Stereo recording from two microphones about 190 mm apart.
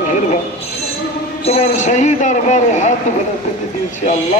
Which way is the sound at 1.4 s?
35° left (ahead or behind).